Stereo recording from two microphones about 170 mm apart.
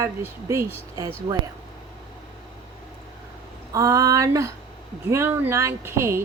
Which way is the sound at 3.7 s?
20° right (ahead or behind).